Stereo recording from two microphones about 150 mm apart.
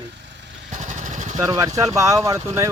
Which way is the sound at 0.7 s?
55° right (ahead or behind).